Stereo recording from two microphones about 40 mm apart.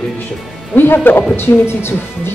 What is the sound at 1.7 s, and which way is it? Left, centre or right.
Speech, left.